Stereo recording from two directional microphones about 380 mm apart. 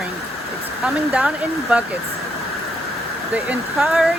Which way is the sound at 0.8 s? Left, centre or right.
Centre.